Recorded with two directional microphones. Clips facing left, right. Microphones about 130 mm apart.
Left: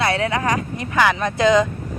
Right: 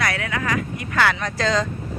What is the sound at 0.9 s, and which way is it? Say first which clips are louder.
Speech: left 3 dB; 15° left (ahead or behind).